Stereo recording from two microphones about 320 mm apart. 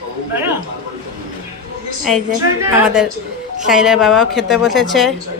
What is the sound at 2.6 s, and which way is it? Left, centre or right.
A woman's voice, centre.